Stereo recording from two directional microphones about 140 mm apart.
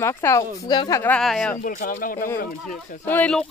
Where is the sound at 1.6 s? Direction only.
85° left.